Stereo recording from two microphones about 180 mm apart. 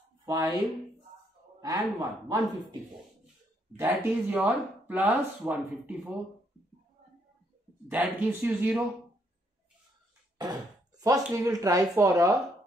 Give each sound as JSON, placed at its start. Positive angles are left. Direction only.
{"t": 0.2, "sound": "speech", "side_deg": -20}
{"t": 1.6, "sound": "a man's voice", "side_deg": -20}
{"t": 3.7, "sound": "speech", "side_deg": -15}
{"t": 7.9, "sound": "speech", "side_deg": -10}
{"t": 10.3, "sound": "speech", "side_deg": -20}